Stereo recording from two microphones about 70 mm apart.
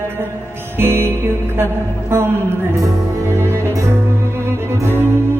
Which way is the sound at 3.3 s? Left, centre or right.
Right.